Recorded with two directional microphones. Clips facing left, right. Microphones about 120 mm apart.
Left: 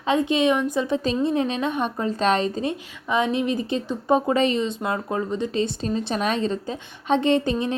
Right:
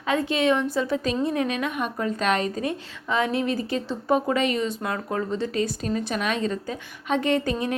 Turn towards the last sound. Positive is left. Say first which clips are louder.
# left 3 dB
turn(degrees=25)  # may be behind; listen again after turning